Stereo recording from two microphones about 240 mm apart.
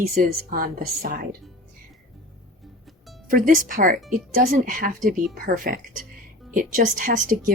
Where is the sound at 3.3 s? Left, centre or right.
Right.